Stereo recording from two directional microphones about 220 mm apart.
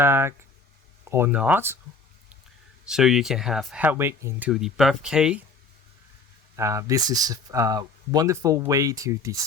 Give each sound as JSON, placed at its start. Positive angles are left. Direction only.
{"t": 0.0, "sound": "speech", "side_deg": -10}
{"t": 2.8, "sound": "speech", "side_deg": 0}
{"t": 6.6, "sound": "speech", "side_deg": -15}